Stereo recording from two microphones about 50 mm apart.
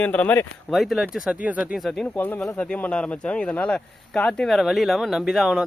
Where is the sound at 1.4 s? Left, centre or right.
Right.